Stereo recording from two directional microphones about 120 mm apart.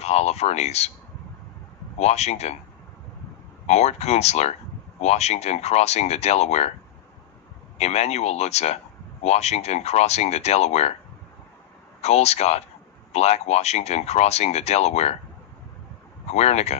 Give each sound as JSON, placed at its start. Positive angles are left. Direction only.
{"t": 0.0, "sound": "speech", "side_deg": 65}
{"t": 2.0, "sound": "speech", "side_deg": 65}
{"t": 3.6, "sound": "speech", "side_deg": 65}
{"t": 7.7, "sound": "speech", "side_deg": 65}
{"t": 12.0, "sound": "speech", "side_deg": 65}
{"t": 16.3, "sound": "speech", "side_deg": 65}